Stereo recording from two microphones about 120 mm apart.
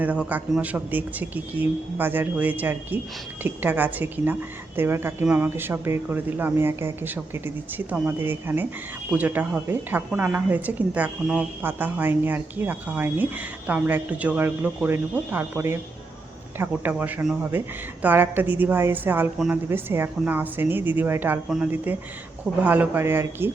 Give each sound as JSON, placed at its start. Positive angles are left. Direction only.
{"t": 0.0, "sound": "speech", "side_deg": -10}